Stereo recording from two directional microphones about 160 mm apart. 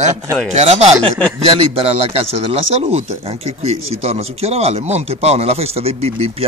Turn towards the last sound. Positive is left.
turn(degrees=-40)  # may be behind; listen again after turning